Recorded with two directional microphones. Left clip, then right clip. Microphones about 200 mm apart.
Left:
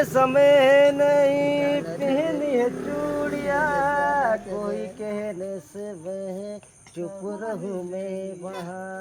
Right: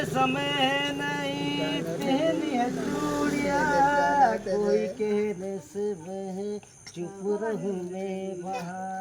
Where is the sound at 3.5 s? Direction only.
20° left (ahead or behind).